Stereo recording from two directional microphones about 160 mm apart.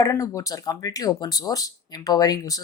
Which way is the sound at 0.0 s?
20° left (ahead or behind).